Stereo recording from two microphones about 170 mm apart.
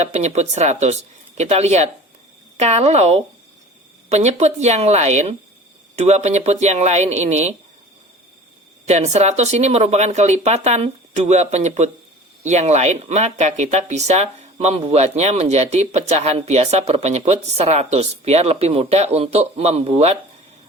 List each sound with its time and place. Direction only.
0.0 s speech: 40° right (ahead or behind)
8.9 s speech: 40° right (ahead or behind)